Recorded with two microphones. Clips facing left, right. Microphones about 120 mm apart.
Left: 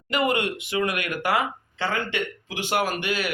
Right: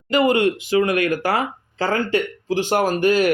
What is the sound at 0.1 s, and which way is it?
Speech, 30° right (ahead or behind).